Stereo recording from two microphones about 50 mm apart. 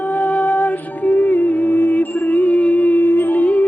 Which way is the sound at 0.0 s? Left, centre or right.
Left.